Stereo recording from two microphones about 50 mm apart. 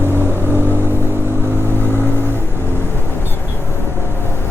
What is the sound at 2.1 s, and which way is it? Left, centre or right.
Vehicle, right.